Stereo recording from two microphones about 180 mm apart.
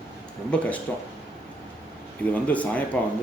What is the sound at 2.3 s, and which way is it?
Speech, 10° left (ahead or behind).